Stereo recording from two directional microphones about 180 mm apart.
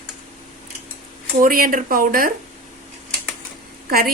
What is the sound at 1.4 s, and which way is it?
Speech, 50° right (ahead or behind).